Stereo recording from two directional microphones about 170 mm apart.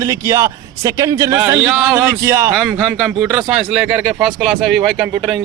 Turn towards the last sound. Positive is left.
turn(degrees=0)  # may be behind; listen again after turning